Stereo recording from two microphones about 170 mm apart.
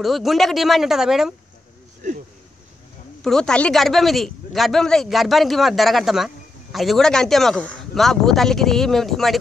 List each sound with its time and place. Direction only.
0.0 s speech: centre (ahead or behind)
2.0 s speech: 50° right (ahead or behind)
3.2 s speech: 5° left (ahead or behind)